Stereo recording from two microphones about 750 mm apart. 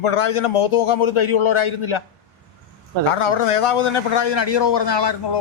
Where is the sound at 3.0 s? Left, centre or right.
Left.